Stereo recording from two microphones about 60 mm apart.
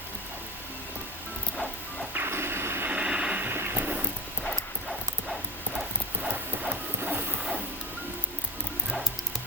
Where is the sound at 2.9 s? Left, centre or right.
Centre.